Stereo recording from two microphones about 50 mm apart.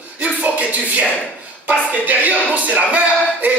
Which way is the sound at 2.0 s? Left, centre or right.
Right.